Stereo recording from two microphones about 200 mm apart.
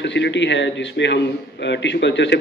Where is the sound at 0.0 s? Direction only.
65° left (ahead or behind).